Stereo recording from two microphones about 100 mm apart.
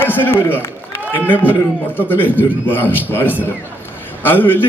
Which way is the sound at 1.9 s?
20° left (ahead or behind).